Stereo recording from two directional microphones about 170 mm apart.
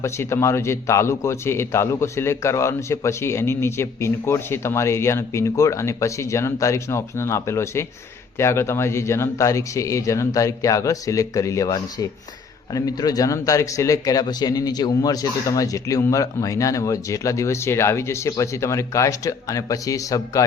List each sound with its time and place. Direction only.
0.0 s a man's voice: 15° left (ahead or behind)